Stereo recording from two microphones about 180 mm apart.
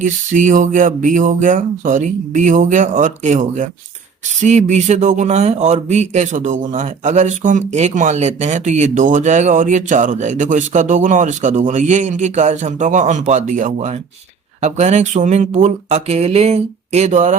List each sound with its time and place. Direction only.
0.0 s speech: 45° right (ahead or behind)